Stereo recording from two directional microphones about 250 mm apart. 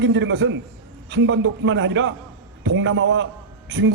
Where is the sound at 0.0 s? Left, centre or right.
Right.